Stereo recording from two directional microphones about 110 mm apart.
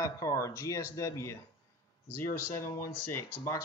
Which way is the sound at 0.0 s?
30° left (ahead or behind).